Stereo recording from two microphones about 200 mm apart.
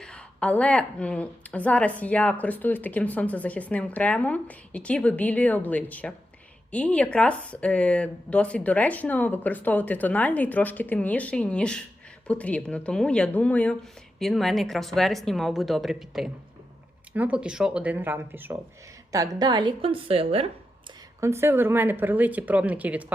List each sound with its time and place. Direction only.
0.0 s a woman's voice: 5° left (ahead or behind); by 20.5 s 30° right (ahead or behind)
21.2 s speech: 15° right (ahead or behind)